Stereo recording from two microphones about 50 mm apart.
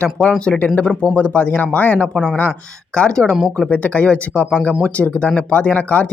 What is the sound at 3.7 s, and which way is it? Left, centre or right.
Speech, left.